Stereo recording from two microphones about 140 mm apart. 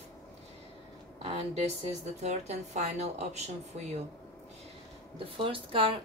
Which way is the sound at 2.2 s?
55° right (ahead or behind).